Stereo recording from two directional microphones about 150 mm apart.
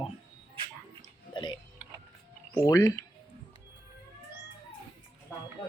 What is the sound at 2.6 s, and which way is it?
Speech, 25° left (ahead or behind).